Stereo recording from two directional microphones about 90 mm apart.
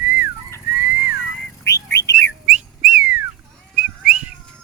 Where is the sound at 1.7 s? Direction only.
35° left (ahead or behind).